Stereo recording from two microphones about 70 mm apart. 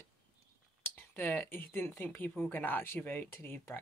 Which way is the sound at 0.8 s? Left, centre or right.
Left.